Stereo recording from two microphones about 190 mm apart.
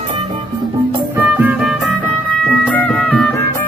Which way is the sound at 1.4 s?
10° right (ahead or behind).